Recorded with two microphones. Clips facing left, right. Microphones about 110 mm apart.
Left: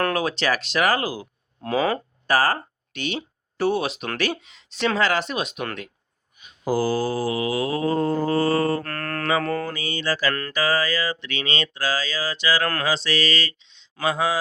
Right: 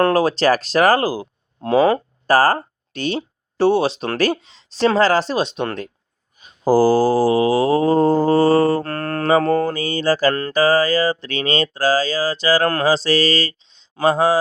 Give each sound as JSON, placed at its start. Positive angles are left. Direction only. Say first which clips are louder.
{"t": 0.0, "sound": "speech", "louder": "right 8 dB", "side_deg": -35}
{"t": 6.4, "sound": "mantra", "louder": "right 9 dB", "side_deg": -35}